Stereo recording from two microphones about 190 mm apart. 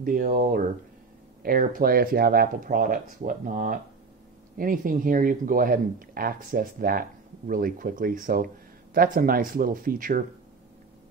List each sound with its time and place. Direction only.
0.0 s speech: 45° right (ahead or behind)